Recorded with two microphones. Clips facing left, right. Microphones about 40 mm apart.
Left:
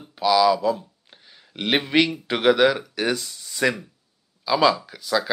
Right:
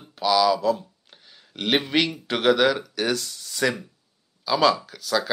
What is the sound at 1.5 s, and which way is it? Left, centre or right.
A man's voice, centre.